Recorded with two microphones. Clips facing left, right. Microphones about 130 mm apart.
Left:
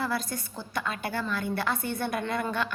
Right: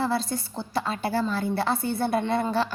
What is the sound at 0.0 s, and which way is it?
A woman's voice, 30° right (ahead or behind).